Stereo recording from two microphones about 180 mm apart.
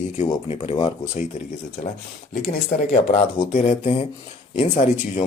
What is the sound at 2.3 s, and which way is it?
Speech, 45° left (ahead or behind).